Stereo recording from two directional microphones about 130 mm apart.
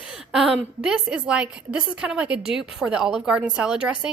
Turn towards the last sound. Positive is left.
turn(degrees=-5)  # may be behind; listen again after turning